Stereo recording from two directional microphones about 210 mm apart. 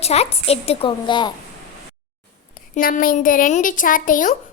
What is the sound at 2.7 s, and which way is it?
A child's voice, 40° left (ahead or behind).